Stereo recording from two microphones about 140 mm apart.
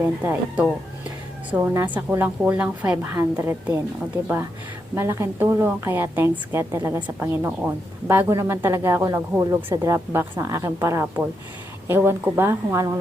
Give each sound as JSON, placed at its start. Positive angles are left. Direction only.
{"t": 0.3, "sound": "a woman's voice", "side_deg": -10}
{"t": 4.9, "sound": "a woman's voice", "side_deg": -20}